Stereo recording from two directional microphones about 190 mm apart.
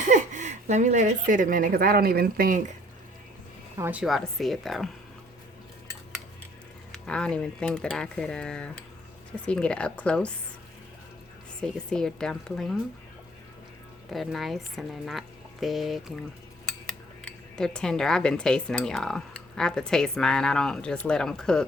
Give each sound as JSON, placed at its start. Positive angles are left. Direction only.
{"t": 0.1, "sound": "a woman's voice", "side_deg": -40}
{"t": 3.8, "sound": "speech", "side_deg": -10}
{"t": 4.0, "sound": "speech", "side_deg": 0}
{"t": 7.0, "sound": "speech", "side_deg": 5}
{"t": 11.6, "sound": "speech", "side_deg": 5}
{"t": 14.1, "sound": "speech", "side_deg": 0}